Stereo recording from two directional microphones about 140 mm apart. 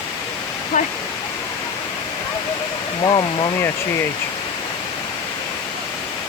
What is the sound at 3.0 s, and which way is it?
Speech, 30° left (ahead or behind).